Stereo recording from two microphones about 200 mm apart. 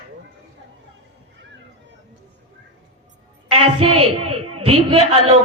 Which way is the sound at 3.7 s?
30° right (ahead or behind).